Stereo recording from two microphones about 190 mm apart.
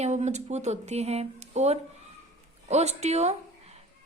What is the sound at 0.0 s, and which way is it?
A woman's voice, 35° right (ahead or behind).